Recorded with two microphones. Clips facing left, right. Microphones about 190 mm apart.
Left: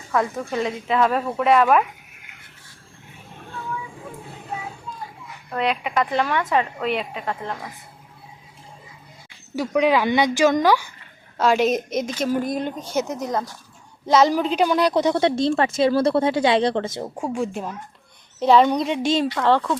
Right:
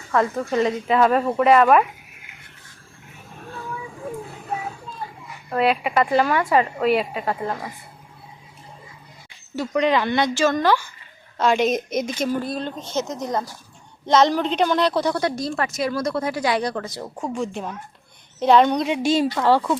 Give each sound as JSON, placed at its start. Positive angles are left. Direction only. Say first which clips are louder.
{"t": 0.1, "sound": "a woman's voice", "louder": "right 2 dB", "side_deg": 0}
{"t": 2.3, "sound": "a sound", "louder": "even", "side_deg": 0}
{"t": 5.5, "sound": "a woman's voice", "louder": "right 4 dB", "side_deg": -5}
{"t": 9.6, "sound": "a woman's voice", "louder": "left 1 dB", "side_deg": 5}
{"t": 12.3, "sound": "a woman's voice", "louder": "left 2 dB", "side_deg": 15}
{"t": 13.2, "sound": "a woman's voice", "louder": "even", "side_deg": 0}
{"t": 17.2, "sound": "a woman's voice", "louder": "even", "side_deg": 10}